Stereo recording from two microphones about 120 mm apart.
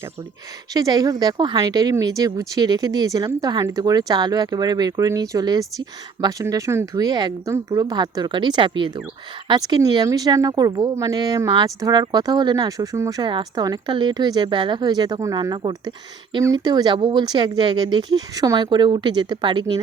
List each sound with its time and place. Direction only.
0.7 s speech: 30° right (ahead or behind)